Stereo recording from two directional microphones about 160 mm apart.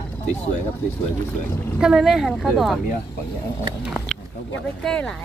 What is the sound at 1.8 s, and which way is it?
Speech, 5° right (ahead or behind).